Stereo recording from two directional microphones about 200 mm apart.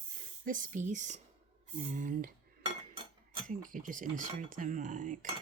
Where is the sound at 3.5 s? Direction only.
40° right (ahead or behind).